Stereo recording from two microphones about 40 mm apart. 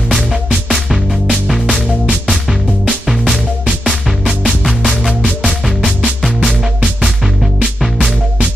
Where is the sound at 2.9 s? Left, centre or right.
Centre.